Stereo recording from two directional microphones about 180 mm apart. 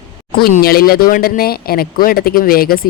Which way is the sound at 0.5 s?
55° left (ahead or behind).